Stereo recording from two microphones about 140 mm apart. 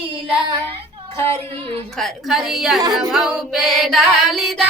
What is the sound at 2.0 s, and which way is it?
Music, centre (ahead or behind).